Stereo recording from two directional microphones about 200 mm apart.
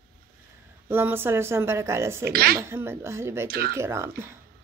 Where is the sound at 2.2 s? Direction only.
50° right (ahead or behind).